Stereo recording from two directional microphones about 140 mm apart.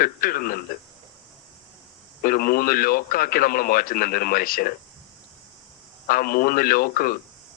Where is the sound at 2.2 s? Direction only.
90° left.